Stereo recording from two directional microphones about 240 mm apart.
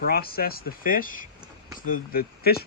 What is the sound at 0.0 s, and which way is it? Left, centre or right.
Speech, left.